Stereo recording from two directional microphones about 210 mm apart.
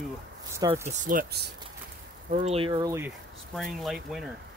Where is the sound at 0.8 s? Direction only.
40° right (ahead or behind); by 3.1 s 15° right (ahead or behind).